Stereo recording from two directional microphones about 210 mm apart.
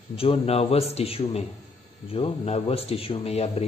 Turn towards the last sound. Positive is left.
turn(degrees=30)  # may be behind; listen again after turning